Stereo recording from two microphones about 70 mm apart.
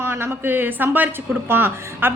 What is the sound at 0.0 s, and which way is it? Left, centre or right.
A woman's voice, right.